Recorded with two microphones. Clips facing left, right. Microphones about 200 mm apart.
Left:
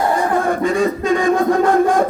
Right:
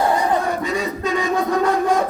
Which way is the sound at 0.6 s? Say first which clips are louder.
Left 6 dB; 50° left (ahead or behind).